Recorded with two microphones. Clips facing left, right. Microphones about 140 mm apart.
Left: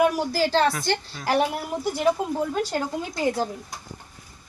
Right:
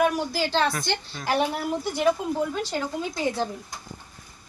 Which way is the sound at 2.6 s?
40° left (ahead or behind).